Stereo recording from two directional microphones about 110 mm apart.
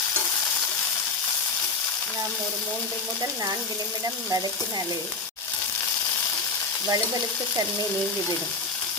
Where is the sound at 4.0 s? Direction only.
35° right (ahead or behind).